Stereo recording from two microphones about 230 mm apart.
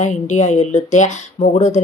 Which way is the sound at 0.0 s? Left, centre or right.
Left.